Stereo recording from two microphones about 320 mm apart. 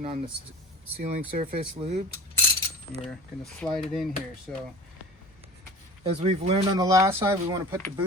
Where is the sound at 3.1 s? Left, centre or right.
Centre.